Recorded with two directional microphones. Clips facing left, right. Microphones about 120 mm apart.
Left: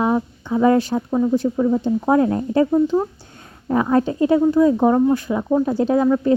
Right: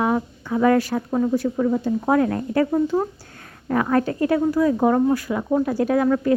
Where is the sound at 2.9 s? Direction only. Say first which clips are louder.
Left 2 dB; 5° right (ahead or behind).